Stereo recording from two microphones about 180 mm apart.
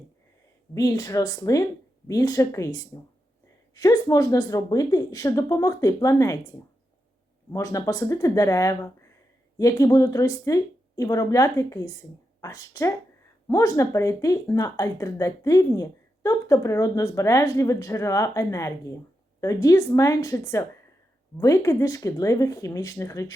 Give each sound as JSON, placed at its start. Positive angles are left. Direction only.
{"t": 0.7, "sound": "speech", "side_deg": 20}
{"t": 7.5, "sound": "speech", "side_deg": 15}